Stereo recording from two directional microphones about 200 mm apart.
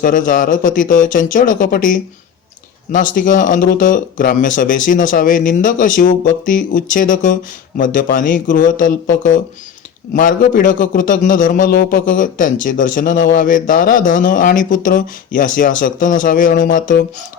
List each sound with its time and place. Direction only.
0.0 s a man's voice: 40° left (ahead or behind)